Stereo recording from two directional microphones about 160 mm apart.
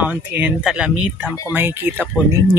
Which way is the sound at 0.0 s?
10° right (ahead or behind).